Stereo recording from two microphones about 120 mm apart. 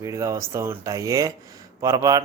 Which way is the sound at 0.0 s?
25° right (ahead or behind).